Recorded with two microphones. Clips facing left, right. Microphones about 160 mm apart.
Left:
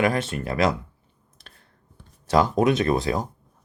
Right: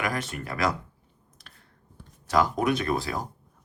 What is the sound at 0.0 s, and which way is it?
Speech, 25° left (ahead or behind).